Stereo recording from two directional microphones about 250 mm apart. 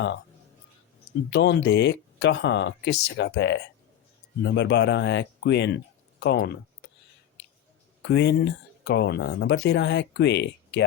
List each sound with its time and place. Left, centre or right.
1.3 s speech: left
8.0 s speech: left